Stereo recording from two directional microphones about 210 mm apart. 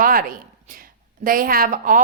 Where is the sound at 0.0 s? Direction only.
45° right (ahead or behind).